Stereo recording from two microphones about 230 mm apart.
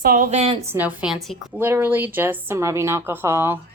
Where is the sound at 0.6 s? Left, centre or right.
Centre.